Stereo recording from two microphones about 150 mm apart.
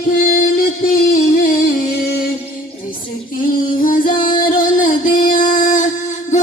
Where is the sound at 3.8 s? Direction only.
65° left (ahead or behind).